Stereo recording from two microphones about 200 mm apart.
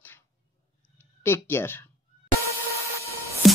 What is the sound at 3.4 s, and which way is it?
Music, centre (ahead or behind).